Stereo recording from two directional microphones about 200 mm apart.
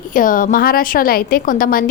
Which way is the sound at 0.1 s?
45° left (ahead or behind).